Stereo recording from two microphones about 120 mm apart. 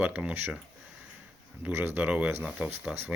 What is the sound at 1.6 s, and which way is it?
Speech, 15° right (ahead or behind).